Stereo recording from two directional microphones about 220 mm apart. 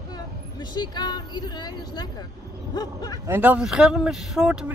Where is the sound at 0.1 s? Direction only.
20° left (ahead or behind).